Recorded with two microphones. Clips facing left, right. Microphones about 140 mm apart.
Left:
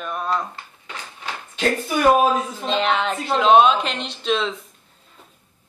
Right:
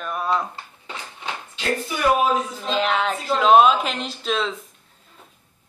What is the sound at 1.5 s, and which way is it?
Speech, 50° left (ahead or behind).